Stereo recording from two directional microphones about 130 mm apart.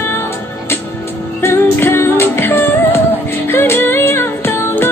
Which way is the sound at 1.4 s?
20° left (ahead or behind).